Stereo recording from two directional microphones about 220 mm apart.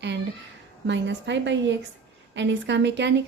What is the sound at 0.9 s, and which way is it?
A woman's voice, 55° right (ahead or behind).